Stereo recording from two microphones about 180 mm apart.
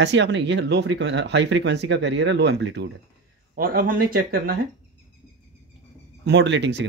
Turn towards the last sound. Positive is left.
turn(degrees=-80)